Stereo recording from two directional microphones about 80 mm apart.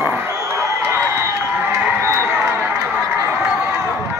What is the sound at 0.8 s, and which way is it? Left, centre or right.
Chicken, right.